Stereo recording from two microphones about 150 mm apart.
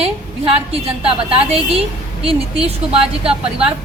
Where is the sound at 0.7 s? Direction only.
40° right (ahead or behind).